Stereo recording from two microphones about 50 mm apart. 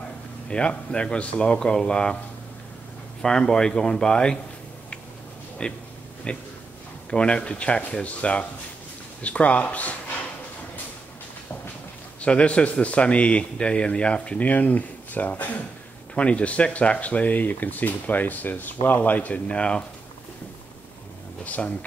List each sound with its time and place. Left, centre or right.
0.5 s a man's voice: centre
3.2 s speech: centre
5.6 s a man's voice: left
12.2 s a man's voice: left
16.2 s speech: left
19.4 s a man's voice: centre
21.5 s a man's voice: left